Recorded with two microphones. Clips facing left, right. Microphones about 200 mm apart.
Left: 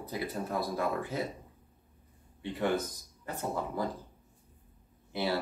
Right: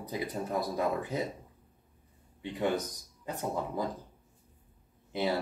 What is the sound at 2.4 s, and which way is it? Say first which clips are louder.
Speech: even; 15° right (ahead or behind).